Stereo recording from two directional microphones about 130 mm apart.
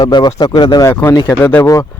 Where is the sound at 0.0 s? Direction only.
35° left (ahead or behind).